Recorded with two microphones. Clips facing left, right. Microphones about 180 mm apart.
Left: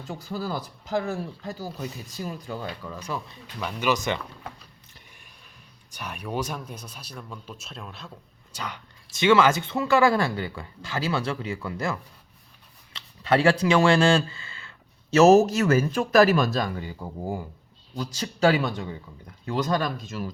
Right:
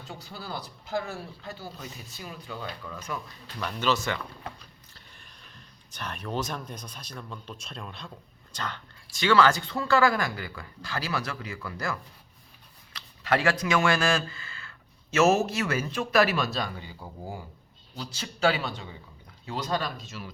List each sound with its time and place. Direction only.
0.1 s speech: 45° left (ahead or behind)
3.4 s speech: 10° left (ahead or behind)
5.9 s speech: 10° left (ahead or behind)
9.1 s speech: 20° left (ahead or behind)
15.1 s speech: 40° left (ahead or behind)